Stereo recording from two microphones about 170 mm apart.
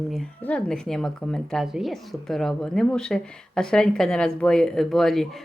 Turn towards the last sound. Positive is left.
turn(degrees=0)  # may be behind; listen again after turning